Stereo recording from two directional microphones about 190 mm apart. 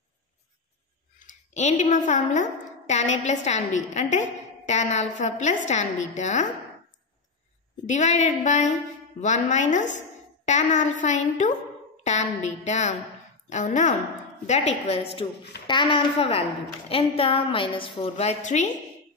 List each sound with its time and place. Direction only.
1.2 s a woman's voice: 40° left (ahead or behind)
7.9 s a woman's voice: 40° left (ahead or behind)